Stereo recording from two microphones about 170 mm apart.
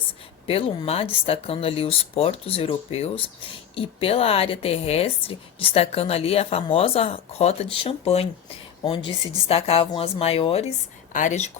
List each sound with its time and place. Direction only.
0.4 s a woman's voice: 35° left (ahead or behind)
11.1 s speech: 45° left (ahead or behind)